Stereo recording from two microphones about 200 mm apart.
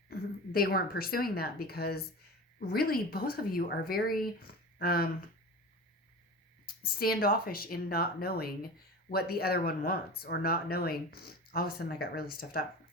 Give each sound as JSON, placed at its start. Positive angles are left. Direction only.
{"t": 0.1, "sound": "speech", "side_deg": 50}
{"t": 6.7, "sound": "speech", "side_deg": 45}